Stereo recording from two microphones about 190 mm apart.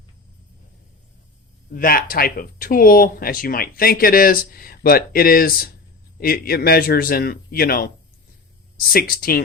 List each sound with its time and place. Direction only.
1.7 s speech: 50° left (ahead or behind)
8.9 s speech: 50° left (ahead or behind)